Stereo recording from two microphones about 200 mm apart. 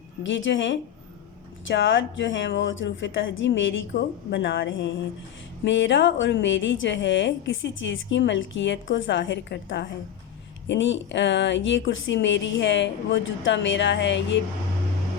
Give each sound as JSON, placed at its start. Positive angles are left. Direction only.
{"t": 0.2, "sound": "a woman's voice", "side_deg": 65}